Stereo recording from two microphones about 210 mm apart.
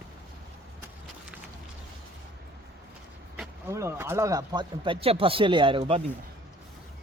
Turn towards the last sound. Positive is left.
turn(degrees=-25)  # may be behind; listen again after turning